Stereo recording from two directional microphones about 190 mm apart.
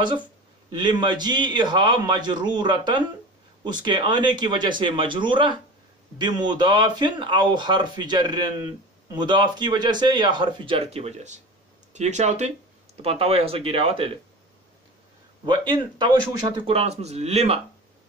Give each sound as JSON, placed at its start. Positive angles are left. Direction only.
{"t": 0.7, "sound": "speech", "side_deg": -25}
{"t": 15.4, "sound": "speech", "side_deg": -25}